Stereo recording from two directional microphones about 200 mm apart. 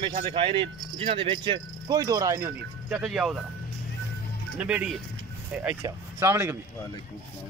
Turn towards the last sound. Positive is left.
turn(degrees=-15)  # may be behind; listen again after turning